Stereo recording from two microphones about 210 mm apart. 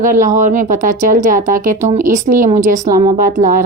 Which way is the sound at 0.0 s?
40° right (ahead or behind).